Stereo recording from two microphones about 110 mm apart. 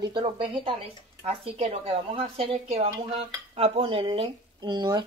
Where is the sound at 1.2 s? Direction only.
70° right (ahead or behind).